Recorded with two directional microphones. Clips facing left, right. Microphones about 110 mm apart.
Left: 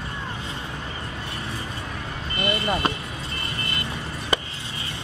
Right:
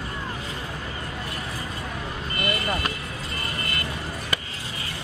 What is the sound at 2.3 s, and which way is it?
Vehicle, 25° left (ahead or behind).